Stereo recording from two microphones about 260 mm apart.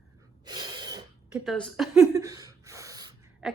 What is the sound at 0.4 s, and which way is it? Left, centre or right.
Gasp, centre.